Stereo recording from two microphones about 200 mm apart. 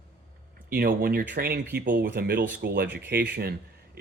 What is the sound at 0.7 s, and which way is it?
Speech, 45° right (ahead or behind).